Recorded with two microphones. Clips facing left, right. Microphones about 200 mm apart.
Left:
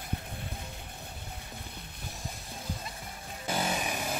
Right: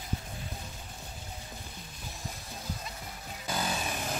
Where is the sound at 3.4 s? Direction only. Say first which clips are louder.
Left 2 dB; 25° left (ahead or behind).